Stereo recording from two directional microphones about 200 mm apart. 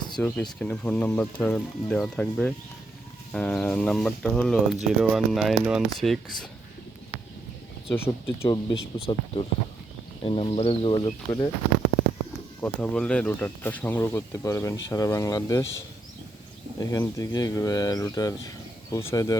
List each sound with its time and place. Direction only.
0.2 s speech: 10° left (ahead or behind)
7.9 s speech: 10° left (ahead or behind)
8.4 s speech: 30° left (ahead or behind)
12.6 s speech: 5° left (ahead or behind)
16.9 s speech: 15° left (ahead or behind)